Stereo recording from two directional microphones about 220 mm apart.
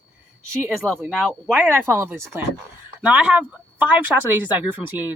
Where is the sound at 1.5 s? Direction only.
10° right (ahead or behind).